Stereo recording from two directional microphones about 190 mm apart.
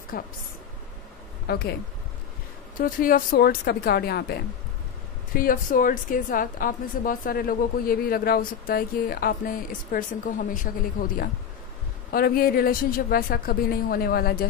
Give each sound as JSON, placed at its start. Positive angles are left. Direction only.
{"t": 0.1, "sound": "a woman's voice", "side_deg": 50}
{"t": 1.5, "sound": "a woman's voice", "side_deg": 55}
{"t": 2.8, "sound": "a woman's voice", "side_deg": 45}